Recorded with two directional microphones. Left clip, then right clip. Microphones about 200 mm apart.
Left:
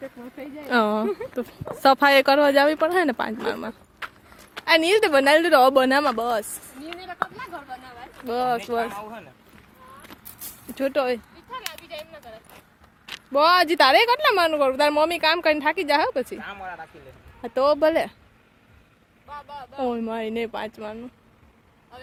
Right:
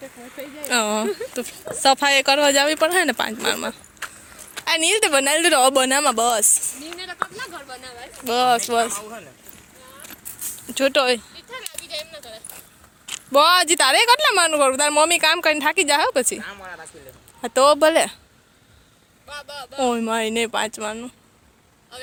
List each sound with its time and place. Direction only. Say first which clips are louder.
0.7 s speech: even; 10° left (ahead or behind)
4.0 s horse: right 2 dB; 10° right (ahead or behind)
4.5 s speech: left 1 dB; 10° right (ahead or behind)
7.3 s a sound: right 2 dB; 55° left (ahead or behind)
8.2 s speech: right 6 dB; 5° right (ahead or behind)
10.8 s speech: right 5 dB; 10° right (ahead or behind)
11.9 s dog: right 5 dB; 45° left (ahead or behind)
13.1 s a woman's voice: right 3 dB; 15° right (ahead or behind)
16.4 s speech: even; 25° left (ahead or behind)
17.4 s a woman's voice: right 5 dB; 20° right (ahead or behind)
19.3 s speech: right 3 dB; 40° left (ahead or behind)
19.8 s a woman's voice: right 6 dB; 20° right (ahead or behind)